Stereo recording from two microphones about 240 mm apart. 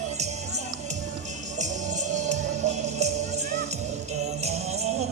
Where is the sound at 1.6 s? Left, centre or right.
Right.